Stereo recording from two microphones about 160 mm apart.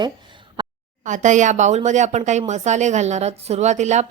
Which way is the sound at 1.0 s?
50° right (ahead or behind).